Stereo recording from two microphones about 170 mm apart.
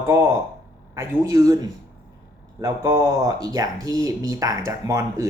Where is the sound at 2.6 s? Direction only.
20° right (ahead or behind).